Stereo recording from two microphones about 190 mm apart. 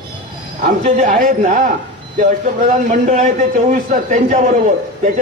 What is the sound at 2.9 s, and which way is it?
A man's voice, 40° right (ahead or behind).